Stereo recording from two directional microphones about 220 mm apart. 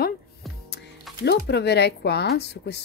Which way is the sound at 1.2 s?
50° left (ahead or behind).